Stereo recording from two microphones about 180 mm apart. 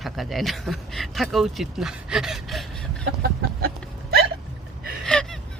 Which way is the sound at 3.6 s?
60° right (ahead or behind).